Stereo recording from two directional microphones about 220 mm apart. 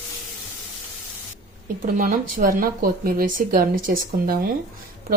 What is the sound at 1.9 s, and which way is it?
Speech, 35° right (ahead or behind).